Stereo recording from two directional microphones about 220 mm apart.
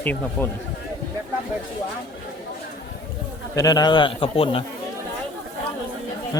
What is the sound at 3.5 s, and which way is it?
A man's voice, 15° left (ahead or behind).